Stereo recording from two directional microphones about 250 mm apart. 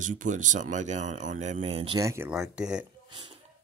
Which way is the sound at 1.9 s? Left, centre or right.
Centre.